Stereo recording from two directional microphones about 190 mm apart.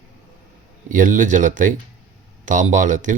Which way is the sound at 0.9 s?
45° right (ahead or behind).